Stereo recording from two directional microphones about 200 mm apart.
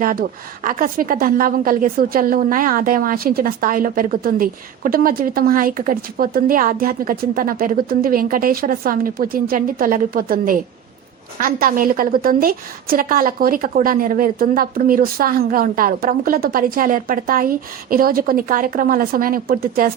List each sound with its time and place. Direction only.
0.0 s a woman's voice: 45° right (ahead or behind)